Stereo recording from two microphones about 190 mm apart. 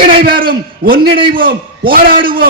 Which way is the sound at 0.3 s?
50° right (ahead or behind).